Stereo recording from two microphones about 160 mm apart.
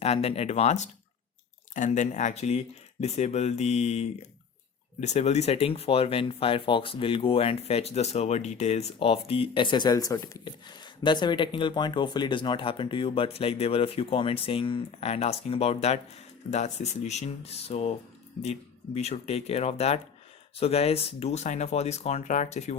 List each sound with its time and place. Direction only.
0.0 s speech: 40° left (ahead or behind)
18.9 s speech: 45° left (ahead or behind)